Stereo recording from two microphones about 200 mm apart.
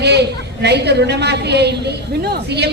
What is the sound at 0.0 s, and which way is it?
A woman's voice, 55° right (ahead or behind).